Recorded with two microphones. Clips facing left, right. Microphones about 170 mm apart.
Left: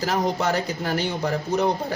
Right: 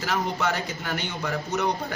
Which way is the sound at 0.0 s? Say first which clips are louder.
Left 4 dB; 35° left (ahead or behind).